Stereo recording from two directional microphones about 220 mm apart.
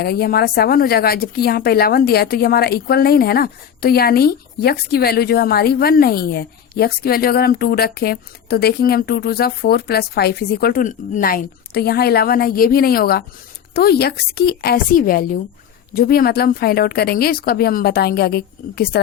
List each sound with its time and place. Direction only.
0.0 s speech: 45° left (ahead or behind)